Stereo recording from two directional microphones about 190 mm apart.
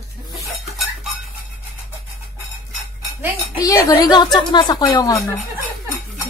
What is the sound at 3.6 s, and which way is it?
A woman's voice, 15° left (ahead or behind).